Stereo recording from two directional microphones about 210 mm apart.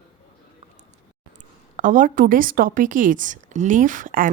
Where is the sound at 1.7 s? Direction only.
40° right (ahead or behind).